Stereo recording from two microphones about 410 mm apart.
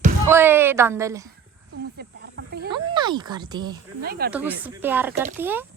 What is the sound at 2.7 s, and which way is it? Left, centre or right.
Speech, centre.